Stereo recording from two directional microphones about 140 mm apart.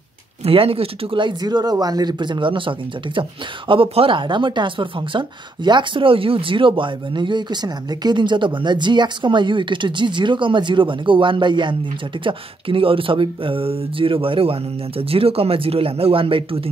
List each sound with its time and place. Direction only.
0.4 s speech: 45° right (ahead or behind)